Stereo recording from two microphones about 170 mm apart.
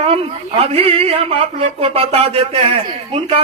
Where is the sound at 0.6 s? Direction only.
35° right (ahead or behind).